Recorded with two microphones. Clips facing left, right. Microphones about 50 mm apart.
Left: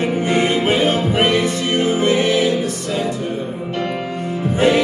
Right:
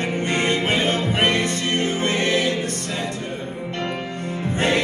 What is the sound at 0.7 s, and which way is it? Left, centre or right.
Music, right.